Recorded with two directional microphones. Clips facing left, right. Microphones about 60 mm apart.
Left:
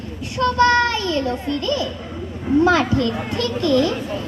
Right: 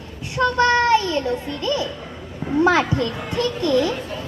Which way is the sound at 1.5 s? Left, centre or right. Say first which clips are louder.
Left 2 dB; right.